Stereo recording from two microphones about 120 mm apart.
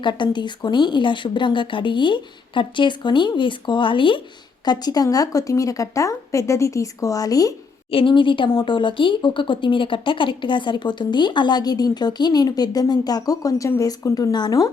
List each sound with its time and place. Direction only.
0.0 s a woman's voice: 40° left (ahead or behind)
7.9 s speech: 45° left (ahead or behind)